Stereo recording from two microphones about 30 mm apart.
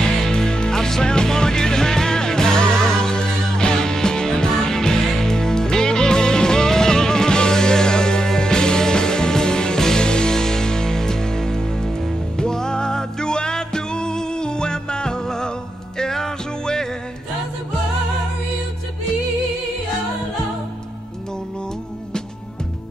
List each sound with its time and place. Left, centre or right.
0.0 s music: left
10.0 s music: left